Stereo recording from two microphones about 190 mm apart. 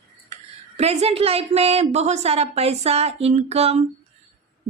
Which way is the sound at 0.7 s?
35° right (ahead or behind).